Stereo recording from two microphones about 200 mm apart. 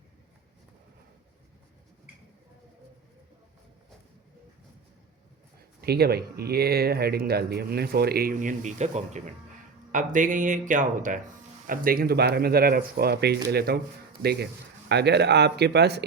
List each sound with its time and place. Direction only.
5.8 s speech: 50° right (ahead or behind)